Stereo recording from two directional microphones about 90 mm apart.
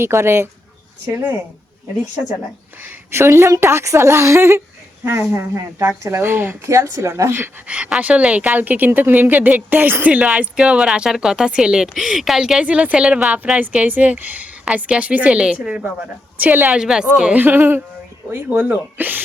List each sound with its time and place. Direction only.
0.0 s a woman's voice: 30° right (ahead or behind)
1.0 s speech: 20° right (ahead or behind)
3.1 s a woman's voice: 30° right (ahead or behind)
6.7 s a woman's voice: 35° right (ahead or behind)
7.7 s a woman's voice: 10° right (ahead or behind)
16.7 s a woman's voice: 5° right (ahead or behind)
17.4 s speech: 20° right (ahead or behind)